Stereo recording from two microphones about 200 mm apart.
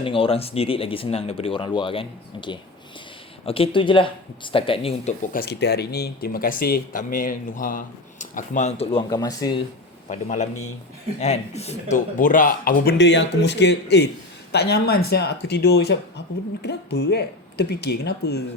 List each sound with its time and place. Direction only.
0.0 s speech: 25° left (ahead or behind)
10.1 s a man's voice: 35° left (ahead or behind); by 18.4 s 55° left (ahead or behind)